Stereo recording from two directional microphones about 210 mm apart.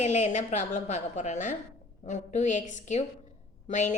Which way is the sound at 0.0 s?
35° left (ahead or behind).